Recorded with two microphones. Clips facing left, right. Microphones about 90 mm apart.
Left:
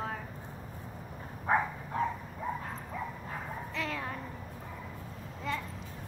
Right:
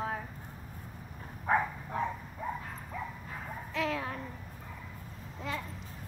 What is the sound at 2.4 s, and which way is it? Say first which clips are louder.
Bow-wow: left 1 dB; centre (ahead or behind).